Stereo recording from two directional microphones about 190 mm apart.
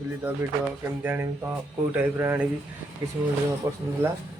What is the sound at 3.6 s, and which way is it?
Speech, 15° right (ahead or behind).